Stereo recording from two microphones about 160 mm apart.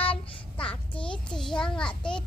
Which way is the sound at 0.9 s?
30° left (ahead or behind).